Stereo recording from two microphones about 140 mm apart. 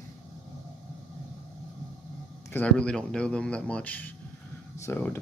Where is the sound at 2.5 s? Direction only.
10° left (ahead or behind).